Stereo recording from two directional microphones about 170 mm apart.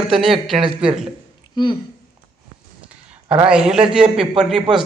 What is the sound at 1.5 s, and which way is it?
Speech, 25° left (ahead or behind).